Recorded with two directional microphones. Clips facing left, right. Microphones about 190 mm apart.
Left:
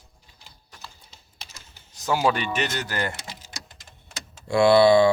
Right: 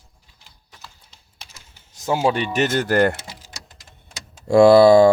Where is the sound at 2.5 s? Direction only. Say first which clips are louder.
Right 10 dB; 45° right (ahead or behind).